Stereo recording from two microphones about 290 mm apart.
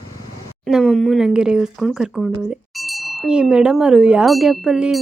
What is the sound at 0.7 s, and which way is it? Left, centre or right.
Wind chime, centre.